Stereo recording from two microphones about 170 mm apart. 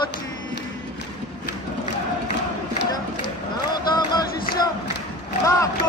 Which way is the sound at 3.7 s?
25° left (ahead or behind).